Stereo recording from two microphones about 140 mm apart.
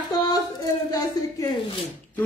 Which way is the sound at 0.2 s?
25° left (ahead or behind).